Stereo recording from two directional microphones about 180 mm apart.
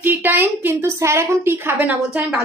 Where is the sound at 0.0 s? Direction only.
10° right (ahead or behind).